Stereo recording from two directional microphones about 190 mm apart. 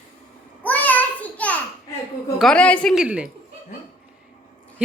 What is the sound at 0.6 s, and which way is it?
Child singing, 10° left (ahead or behind).